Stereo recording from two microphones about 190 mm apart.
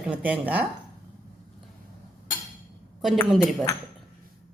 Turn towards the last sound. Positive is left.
turn(degrees=0)  # may be behind; listen again after turning